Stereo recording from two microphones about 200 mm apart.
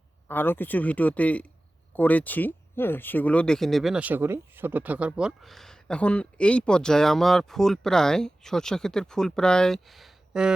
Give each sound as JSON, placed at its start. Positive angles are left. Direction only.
{"t": 0.3, "sound": "speech", "side_deg": 10}